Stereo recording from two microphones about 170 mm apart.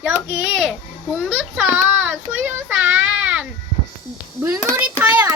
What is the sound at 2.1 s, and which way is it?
Child singing, 10° right (ahead or behind).